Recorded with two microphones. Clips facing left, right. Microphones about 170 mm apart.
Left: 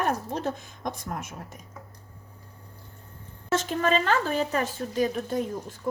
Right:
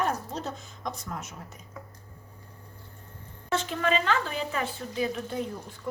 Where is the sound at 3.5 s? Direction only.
45° left (ahead or behind).